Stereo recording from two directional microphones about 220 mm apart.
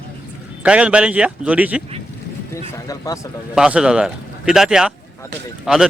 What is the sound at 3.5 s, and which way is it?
A man's voice, 5° right (ahead or behind).